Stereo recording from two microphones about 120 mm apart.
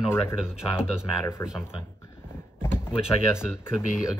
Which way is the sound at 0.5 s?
5° right (ahead or behind).